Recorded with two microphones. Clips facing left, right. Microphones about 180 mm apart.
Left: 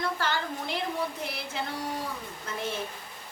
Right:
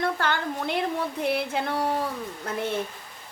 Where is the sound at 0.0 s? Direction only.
60° right (ahead or behind).